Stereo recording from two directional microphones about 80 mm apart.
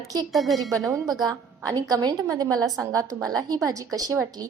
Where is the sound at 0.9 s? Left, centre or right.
Right.